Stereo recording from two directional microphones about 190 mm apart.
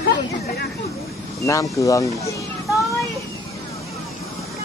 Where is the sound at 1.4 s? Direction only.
15° left (ahead or behind).